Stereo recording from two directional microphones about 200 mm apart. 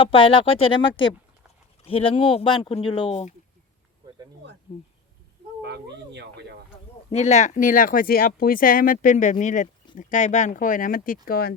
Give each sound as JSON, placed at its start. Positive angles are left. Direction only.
{"t": 0.0, "sound": "speech", "side_deg": 25}
{"t": 5.6, "sound": "speech", "side_deg": -60}
{"t": 7.1, "sound": "speech", "side_deg": 35}